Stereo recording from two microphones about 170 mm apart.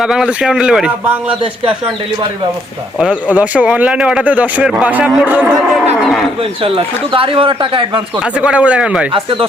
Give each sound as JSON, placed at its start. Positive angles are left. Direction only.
{"t": 0.0, "sound": "speech", "side_deg": -5}
{"t": 3.0, "sound": "speech", "side_deg": -10}
{"t": 6.0, "sound": "speech", "side_deg": 0}
{"t": 6.4, "sound": "speech", "side_deg": -35}
{"t": 8.2, "sound": "speech", "side_deg": -5}